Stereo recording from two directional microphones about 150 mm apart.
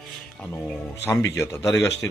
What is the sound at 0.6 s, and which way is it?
A man's voice, 15° left (ahead or behind).